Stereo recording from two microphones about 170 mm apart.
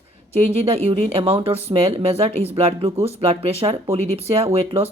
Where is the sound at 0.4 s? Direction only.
35° right (ahead or behind).